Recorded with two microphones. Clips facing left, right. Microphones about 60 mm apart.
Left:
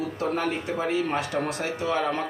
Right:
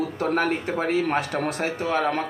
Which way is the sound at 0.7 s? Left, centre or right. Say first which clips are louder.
Right 3 dB; right.